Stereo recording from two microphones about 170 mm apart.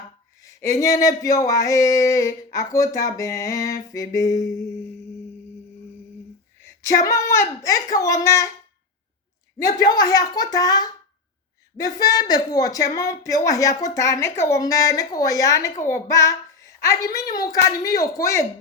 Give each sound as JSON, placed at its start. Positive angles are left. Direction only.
{"t": 0.4, "sound": "speech", "side_deg": 20}
{"t": 6.6, "sound": "a woman's voice", "side_deg": 15}
{"t": 9.6, "sound": "speech", "side_deg": 20}